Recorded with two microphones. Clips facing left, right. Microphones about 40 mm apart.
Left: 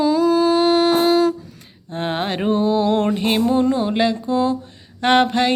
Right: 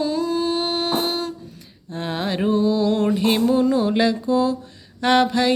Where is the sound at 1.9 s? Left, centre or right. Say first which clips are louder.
Left 2 dB; left.